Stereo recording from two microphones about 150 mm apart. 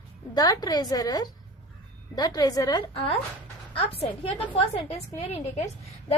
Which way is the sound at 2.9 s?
35° left (ahead or behind).